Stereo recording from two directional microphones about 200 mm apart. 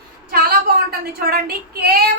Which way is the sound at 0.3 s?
50° right (ahead or behind).